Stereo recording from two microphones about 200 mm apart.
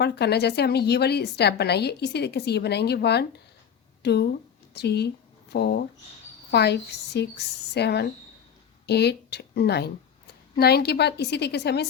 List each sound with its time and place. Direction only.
0.0 s a woman's voice: 55° left (ahead or behind)